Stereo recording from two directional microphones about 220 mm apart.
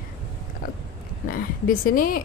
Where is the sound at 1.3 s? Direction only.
40° left (ahead or behind).